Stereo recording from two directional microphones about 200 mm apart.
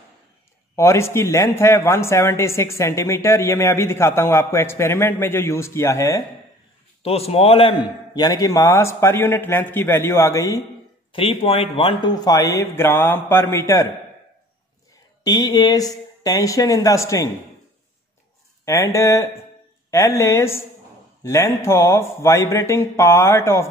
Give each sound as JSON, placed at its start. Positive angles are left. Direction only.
{"t": 0.7, "sound": "speech", "side_deg": 15}
{"t": 7.0, "sound": "speech", "side_deg": 30}
{"t": 11.1, "sound": "speech", "side_deg": 25}
{"t": 15.2, "sound": "speech", "side_deg": 20}
{"t": 18.7, "sound": "speech", "side_deg": 15}